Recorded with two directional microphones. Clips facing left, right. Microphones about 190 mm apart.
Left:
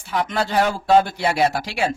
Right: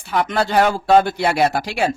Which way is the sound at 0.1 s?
65° right (ahead or behind).